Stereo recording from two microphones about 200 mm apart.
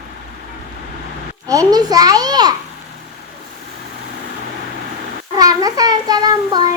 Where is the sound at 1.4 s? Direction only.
15° right (ahead or behind).